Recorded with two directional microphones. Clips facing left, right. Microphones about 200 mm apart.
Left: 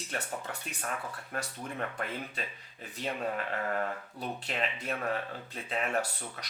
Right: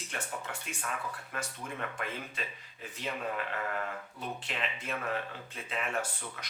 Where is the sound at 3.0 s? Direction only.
40° left (ahead or behind).